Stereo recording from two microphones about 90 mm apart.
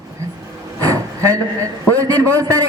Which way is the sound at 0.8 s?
40° right (ahead or behind).